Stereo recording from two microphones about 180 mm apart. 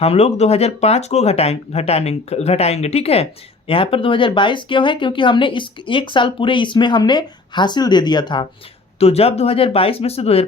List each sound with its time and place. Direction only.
0.0 s speech: 35° left (ahead or behind)